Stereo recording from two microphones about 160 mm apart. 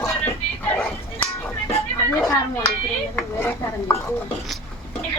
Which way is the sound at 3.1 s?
15° left (ahead or behind).